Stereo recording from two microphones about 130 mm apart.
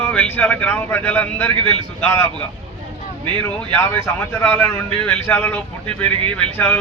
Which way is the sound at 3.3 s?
20° left (ahead or behind).